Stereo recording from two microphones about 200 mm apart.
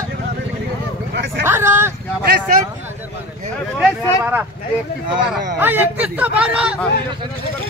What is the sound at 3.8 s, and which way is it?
Speech, 5° right (ahead or behind).